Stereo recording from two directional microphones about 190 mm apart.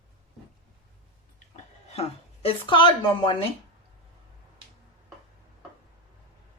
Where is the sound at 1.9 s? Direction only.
30° left (ahead or behind).